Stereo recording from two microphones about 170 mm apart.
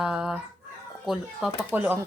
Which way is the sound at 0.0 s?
5° right (ahead or behind).